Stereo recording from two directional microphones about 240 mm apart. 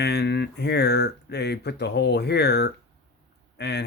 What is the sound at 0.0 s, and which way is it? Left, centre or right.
Speech, left.